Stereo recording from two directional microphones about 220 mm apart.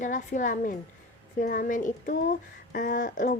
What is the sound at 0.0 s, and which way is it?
A woman's voice, 35° left (ahead or behind).